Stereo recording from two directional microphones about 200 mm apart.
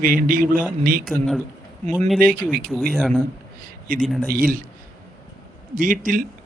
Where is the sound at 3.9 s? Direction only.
45° right (ahead or behind).